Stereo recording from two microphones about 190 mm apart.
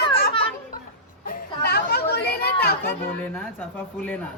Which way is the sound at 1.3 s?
55° left (ahead or behind).